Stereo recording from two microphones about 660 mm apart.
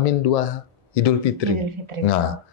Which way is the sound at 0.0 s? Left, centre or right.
Left.